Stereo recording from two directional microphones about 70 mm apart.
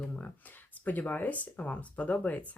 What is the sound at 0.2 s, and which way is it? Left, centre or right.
Speech, left.